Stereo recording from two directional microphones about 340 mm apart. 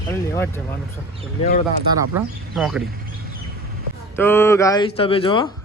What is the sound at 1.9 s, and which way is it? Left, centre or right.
Speech, centre.